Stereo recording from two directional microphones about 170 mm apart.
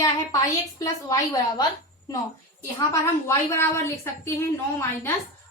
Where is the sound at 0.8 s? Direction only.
20° left (ahead or behind).